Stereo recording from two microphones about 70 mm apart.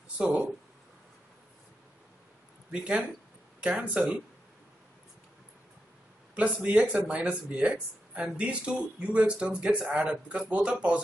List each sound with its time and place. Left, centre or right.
0.2 s speech: centre
2.7 s speech: centre
6.3 s speech: centre